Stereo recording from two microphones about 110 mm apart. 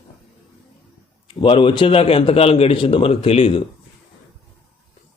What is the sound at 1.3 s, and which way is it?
Speech, 50° left (ahead or behind).